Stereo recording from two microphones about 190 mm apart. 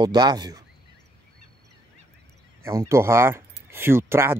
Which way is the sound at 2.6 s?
15° right (ahead or behind).